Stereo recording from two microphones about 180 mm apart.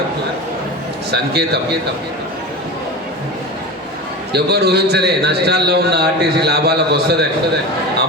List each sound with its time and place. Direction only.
1.1 s a man's voice: 65° right (ahead or behind)
4.3 s a man's voice: 65° right (ahead or behind)